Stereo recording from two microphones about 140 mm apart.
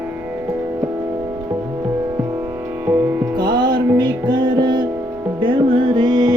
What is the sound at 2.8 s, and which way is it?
Music, 15° right (ahead or behind).